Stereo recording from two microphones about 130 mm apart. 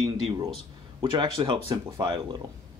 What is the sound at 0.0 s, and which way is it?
Speech, 35° right (ahead or behind).